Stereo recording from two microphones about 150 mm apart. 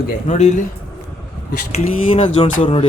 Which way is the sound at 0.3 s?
50° left (ahead or behind).